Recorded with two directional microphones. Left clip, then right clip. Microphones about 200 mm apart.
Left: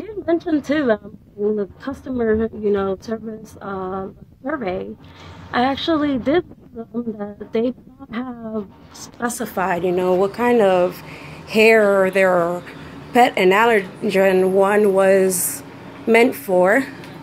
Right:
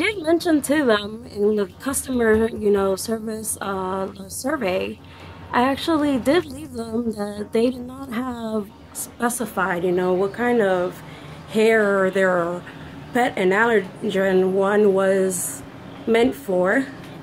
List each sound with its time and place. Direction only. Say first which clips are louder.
0.0 s a woman's voice: right 2 dB; centre (ahead or behind)